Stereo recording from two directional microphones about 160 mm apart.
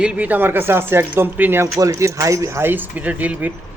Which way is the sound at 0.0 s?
10° right (ahead or behind).